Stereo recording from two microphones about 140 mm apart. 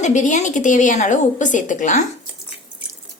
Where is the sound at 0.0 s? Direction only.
60° left (ahead or behind).